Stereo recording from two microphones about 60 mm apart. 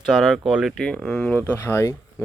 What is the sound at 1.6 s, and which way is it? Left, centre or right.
Speech, left.